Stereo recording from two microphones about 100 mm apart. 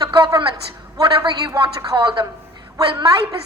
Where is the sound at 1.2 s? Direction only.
50° right (ahead or behind).